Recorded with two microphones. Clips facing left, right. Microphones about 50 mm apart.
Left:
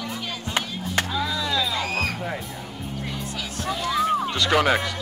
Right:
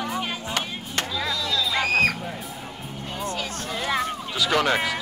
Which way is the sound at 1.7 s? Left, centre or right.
Right.